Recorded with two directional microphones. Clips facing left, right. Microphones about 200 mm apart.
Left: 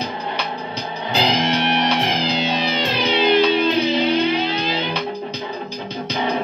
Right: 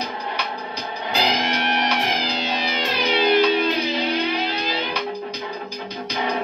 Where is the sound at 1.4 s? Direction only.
25° left (ahead or behind).